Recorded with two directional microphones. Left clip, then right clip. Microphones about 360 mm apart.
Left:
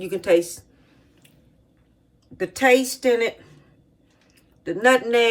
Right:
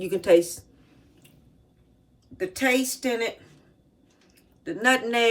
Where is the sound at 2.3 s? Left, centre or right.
Centre.